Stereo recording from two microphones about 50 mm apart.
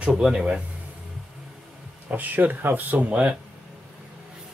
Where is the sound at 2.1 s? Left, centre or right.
Right.